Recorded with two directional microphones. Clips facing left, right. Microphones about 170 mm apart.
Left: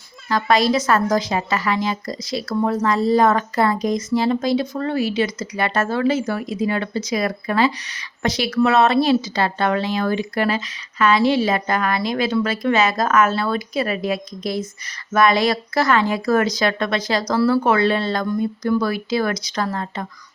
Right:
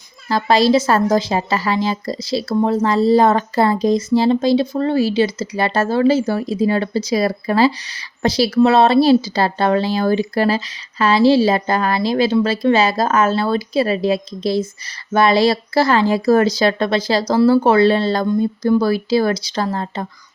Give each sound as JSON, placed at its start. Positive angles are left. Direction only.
{"t": 0.3, "sound": "a woman's voice", "side_deg": -30}